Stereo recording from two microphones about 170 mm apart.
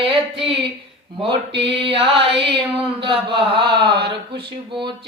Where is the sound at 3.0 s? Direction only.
30° right (ahead or behind).